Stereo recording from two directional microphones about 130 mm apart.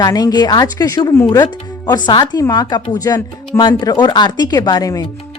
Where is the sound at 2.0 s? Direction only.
35° left (ahead or behind).